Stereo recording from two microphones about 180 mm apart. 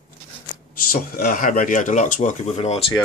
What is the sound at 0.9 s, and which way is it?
Speech, 55° left (ahead or behind).